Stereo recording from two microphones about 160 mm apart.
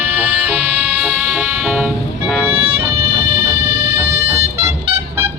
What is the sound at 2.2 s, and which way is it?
Music, 5° left (ahead or behind).